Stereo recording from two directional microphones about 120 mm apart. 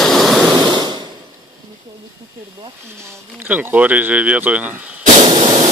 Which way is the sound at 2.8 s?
20° right (ahead or behind).